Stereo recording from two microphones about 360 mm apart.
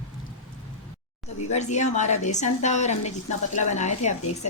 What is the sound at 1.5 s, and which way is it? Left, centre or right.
A woman's voice, centre.